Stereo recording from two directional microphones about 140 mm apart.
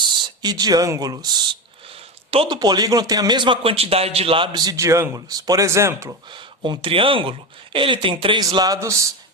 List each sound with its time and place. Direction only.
0.0 s speech: 30° right (ahead or behind)
1.9 s a sound: 40° right (ahead or behind)
2.6 s a man's voice: 30° right (ahead or behind)
6.3 s a man's voice: 35° right (ahead or behind)